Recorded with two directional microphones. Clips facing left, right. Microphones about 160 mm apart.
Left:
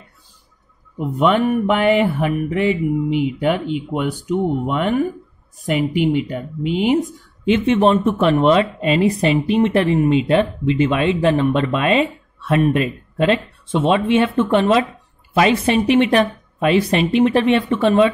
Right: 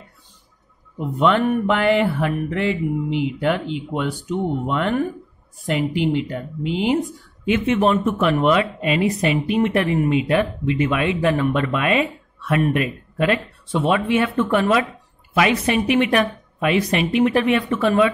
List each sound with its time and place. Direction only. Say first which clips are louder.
0.9 s mantra: left 2 dB; 15° left (ahead or behind)
7.4 s speech: left 3 dB; 30° left (ahead or behind)